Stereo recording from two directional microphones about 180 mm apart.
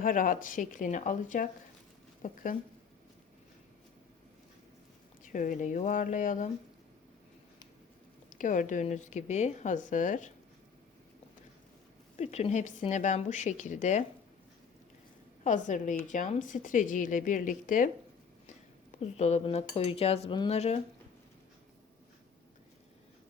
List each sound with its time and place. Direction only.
0.0 s speech: 50° left (ahead or behind)
5.2 s speech: 45° left (ahead or behind)
8.4 s speech: 45° left (ahead or behind)
12.1 s speech: 35° left (ahead or behind)
15.4 s speech: 45° left (ahead or behind)
18.9 s speech: 35° left (ahead or behind)